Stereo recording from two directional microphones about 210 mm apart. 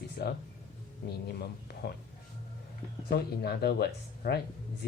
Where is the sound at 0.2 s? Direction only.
55° left (ahead or behind).